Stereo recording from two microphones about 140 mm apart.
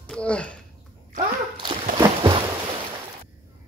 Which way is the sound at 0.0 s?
10° left (ahead or behind).